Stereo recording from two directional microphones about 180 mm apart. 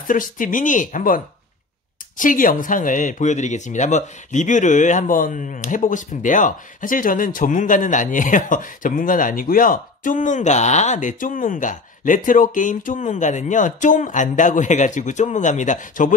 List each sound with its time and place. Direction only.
0.1 s speech: 50° left (ahead or behind)